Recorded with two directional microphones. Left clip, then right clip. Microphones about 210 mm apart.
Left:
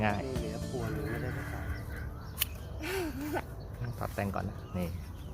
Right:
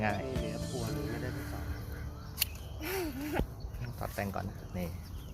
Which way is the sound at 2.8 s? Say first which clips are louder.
Left 1 dB; 15° right (ahead or behind).